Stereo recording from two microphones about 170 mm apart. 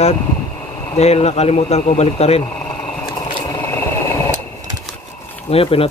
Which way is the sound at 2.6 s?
10° left (ahead or behind).